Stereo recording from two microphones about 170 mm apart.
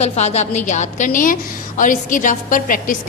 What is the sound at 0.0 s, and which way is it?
A woman's voice, 40° left (ahead or behind).